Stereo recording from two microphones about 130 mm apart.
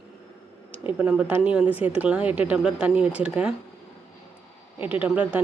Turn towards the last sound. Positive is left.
turn(degrees=-10)  # may be behind; listen again after turning